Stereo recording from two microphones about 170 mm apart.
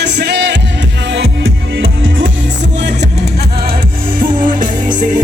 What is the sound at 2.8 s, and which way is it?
Music, 80° right.